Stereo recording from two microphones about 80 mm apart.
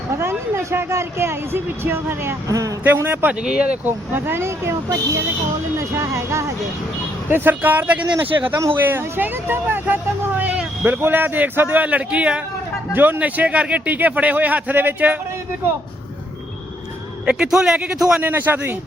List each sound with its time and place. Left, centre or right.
0.2 s speech: right
2.5 s a man's voice: right
2.8 s speech: right
3.4 s a man's voice: centre
3.8 s speech: right
7.3 s speech: right
17.2 s a man's voice: centre
18.2 s speech: right